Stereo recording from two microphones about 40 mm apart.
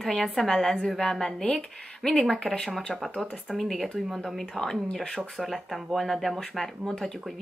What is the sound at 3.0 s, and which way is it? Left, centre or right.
A woman's voice, centre.